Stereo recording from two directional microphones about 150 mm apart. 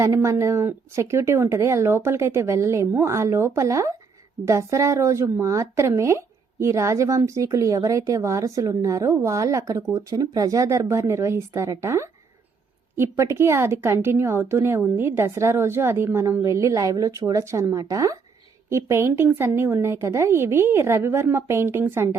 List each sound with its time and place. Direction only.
0.0 s a woman's voice: 20° right (ahead or behind)